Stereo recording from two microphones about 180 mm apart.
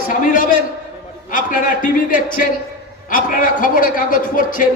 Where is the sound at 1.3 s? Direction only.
45° left (ahead or behind).